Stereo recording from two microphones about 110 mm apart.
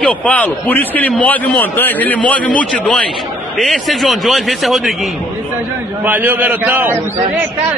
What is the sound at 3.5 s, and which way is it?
A man's voice, centre (ahead or behind).